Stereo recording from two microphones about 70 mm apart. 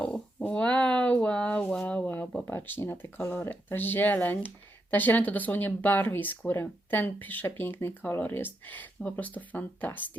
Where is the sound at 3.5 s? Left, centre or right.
Left.